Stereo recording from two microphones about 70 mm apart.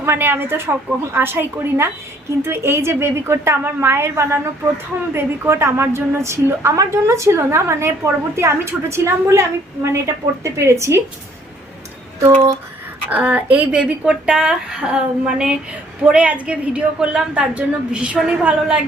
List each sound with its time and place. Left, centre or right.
0.0 s a woman's voice: right
12.2 s a woman's voice: right
13.1 s a woman's voice: right